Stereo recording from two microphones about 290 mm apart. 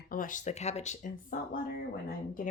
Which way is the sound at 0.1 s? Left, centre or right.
Left.